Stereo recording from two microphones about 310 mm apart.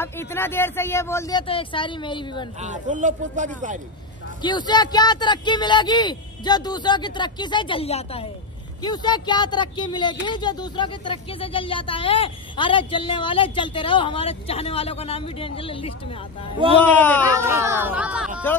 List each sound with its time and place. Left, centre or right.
0.0 s speech: centre
2.6 s speech: right
4.4 s speech: centre
16.8 s speech: centre
17.3 s speech: centre